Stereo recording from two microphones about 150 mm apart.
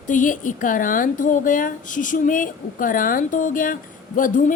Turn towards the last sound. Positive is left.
turn(degrees=60)  # may be behind; listen again after turning